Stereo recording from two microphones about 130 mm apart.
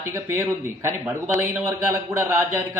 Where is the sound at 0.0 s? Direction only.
20° right (ahead or behind).